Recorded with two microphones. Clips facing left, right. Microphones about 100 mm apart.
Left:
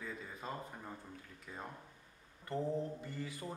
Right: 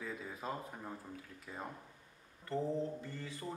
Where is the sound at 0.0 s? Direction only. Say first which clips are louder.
Right 2 dB; 5° right (ahead or behind).